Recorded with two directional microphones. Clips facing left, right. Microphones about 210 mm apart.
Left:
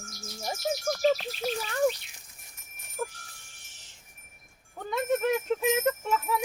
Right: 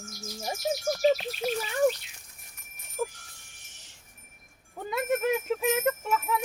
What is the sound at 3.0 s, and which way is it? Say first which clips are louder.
Speech: right 3 dB; centre (ahead or behind).